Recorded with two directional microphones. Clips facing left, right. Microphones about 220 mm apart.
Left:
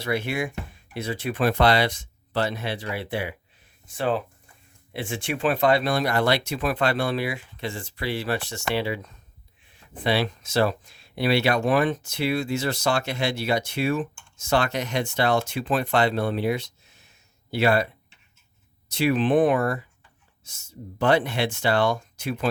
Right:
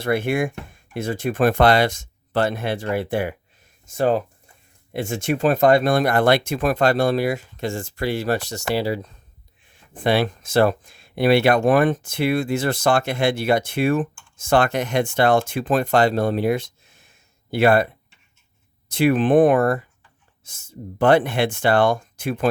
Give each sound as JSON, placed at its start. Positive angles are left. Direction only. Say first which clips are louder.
{"t": 0.0, "sound": "speech", "louder": "right 6 dB", "side_deg": -50}
{"t": 9.9, "sound": "speech", "louder": "right 4 dB", "side_deg": -50}
{"t": 18.9, "sound": "speech", "louder": "right 4 dB", "side_deg": -50}